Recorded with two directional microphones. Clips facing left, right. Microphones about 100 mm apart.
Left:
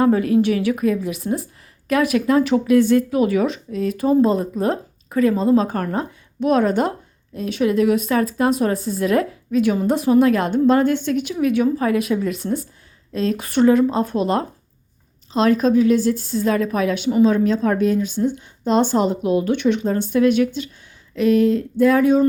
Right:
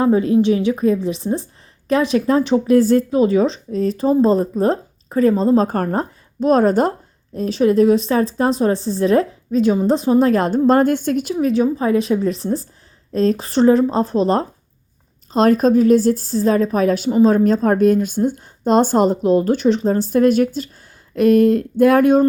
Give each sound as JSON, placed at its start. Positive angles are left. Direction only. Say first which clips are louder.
{"t": 0.0, "sound": "a woman's voice", "louder": "right 1 dB", "side_deg": -25}
{"t": 11.3, "sound": "a woman's voice", "louder": "even", "side_deg": -30}
{"t": 15.3, "sound": "a woman's voice", "louder": "right 3 dB", "side_deg": -45}